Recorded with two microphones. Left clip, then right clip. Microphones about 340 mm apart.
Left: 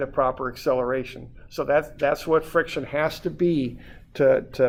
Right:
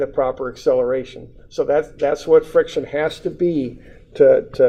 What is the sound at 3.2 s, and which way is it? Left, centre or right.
Speech, left.